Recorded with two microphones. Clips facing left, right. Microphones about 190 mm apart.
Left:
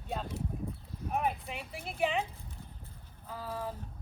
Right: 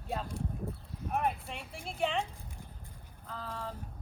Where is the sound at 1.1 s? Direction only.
Centre (ahead or behind).